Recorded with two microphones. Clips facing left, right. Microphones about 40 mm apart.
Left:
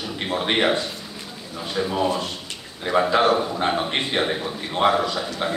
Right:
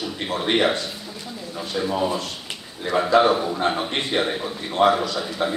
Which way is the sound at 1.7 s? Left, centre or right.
Centre.